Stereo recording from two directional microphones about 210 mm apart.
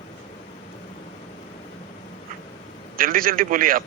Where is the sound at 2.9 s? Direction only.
40° right (ahead or behind).